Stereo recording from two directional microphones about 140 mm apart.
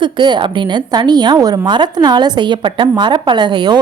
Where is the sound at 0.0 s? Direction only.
35° right (ahead or behind).